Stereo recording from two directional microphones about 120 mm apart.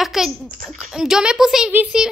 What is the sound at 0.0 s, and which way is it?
A woman's voice, 5° right (ahead or behind).